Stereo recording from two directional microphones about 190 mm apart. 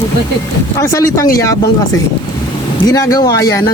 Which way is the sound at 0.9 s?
15° left (ahead or behind).